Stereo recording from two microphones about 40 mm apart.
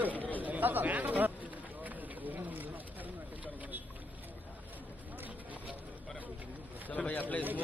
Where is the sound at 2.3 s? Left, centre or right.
Right.